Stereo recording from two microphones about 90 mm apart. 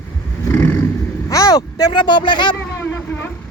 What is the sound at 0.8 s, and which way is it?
Vehicle, 35° left (ahead or behind).